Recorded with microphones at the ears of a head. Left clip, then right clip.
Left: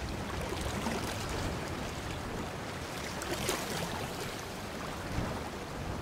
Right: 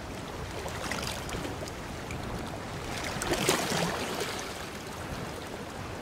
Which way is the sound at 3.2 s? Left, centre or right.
Right.